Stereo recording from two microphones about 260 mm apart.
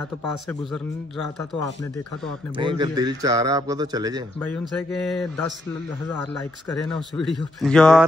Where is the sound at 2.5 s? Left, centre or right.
Centre.